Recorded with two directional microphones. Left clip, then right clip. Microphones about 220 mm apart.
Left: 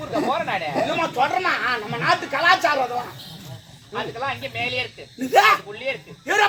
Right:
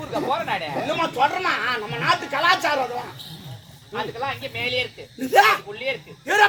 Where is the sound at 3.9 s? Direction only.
Centre (ahead or behind).